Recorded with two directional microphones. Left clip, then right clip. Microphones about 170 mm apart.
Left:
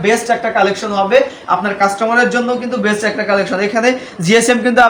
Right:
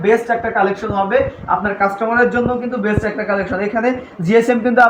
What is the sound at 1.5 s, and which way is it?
Speech, 10° left (ahead or behind).